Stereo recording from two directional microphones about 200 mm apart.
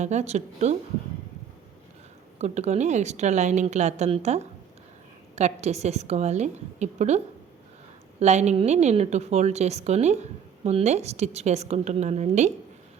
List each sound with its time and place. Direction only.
0.0 s speech: 35° right (ahead or behind)
2.4 s speech: 35° right (ahead or behind)
8.2 s speech: 35° right (ahead or behind)